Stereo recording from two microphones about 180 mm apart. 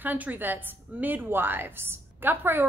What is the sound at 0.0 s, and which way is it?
A woman's voice, 10° right (ahead or behind).